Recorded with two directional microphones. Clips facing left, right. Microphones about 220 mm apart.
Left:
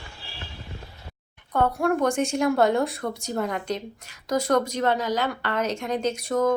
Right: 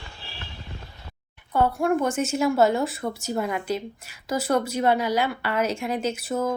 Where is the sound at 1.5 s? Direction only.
5° right (ahead or behind).